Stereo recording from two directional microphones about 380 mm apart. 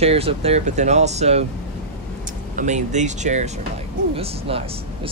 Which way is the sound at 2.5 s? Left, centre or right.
Centre.